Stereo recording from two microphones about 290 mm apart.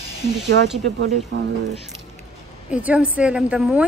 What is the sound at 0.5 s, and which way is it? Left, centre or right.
Speech, right.